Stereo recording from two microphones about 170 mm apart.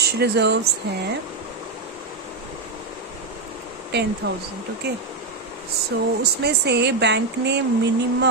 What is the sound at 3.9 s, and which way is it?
Speech, 80° right.